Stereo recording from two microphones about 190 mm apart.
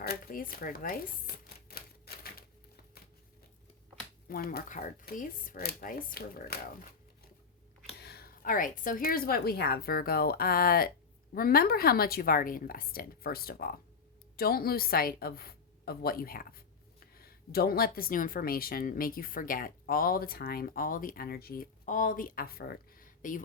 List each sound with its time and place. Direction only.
0.0 s speech: 50° left (ahead or behind)
1.6 s typewriter: 55° left (ahead or behind)
4.3 s speech: 50° left (ahead or behind)
7.9 s a woman's voice: 55° left (ahead or behind)